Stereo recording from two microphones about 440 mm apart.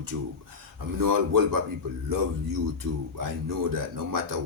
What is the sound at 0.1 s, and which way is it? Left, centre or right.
Speech, right.